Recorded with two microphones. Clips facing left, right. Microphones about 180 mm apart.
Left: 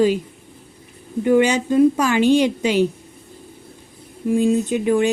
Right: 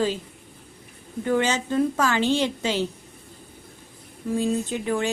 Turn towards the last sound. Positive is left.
turn(degrees=15)  # may be behind; listen again after turning